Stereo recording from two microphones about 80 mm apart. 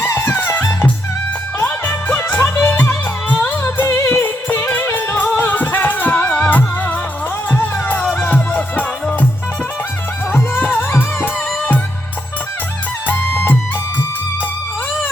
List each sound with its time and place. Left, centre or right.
0.0 s music: left
1.9 s music: left
10.3 s music: left
13.3 s music: left